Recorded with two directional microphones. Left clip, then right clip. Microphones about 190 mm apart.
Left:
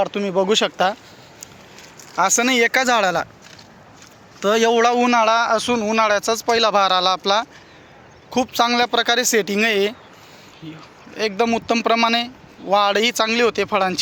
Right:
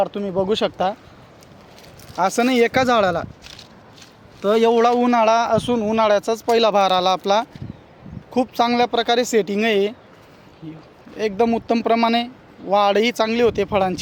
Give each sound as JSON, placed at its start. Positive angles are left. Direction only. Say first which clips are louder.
{"t": 0.0, "sound": "speech", "louder": "left 2 dB", "side_deg": 10}
{"t": 2.1, "sound": "speech", "louder": "left 1 dB", "side_deg": -10}
{"t": 4.4, "sound": "a man's voice", "louder": "even", "side_deg": -5}